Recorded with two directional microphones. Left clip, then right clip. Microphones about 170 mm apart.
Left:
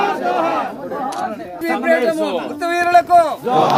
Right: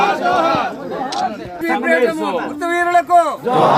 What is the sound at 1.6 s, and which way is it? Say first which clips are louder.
A man's voice: right 1 dB; 5° left (ahead or behind).